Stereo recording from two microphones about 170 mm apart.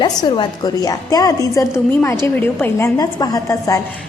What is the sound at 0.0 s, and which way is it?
A woman's voice, 25° left (ahead or behind).